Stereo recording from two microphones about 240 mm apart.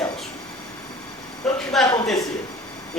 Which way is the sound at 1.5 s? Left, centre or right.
Centre.